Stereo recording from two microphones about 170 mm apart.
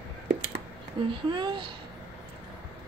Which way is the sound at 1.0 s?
30° right (ahead or behind).